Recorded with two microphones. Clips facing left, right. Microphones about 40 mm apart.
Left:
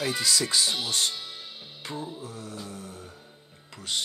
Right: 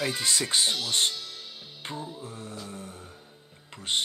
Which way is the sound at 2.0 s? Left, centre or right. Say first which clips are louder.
Left 3 dB; centre.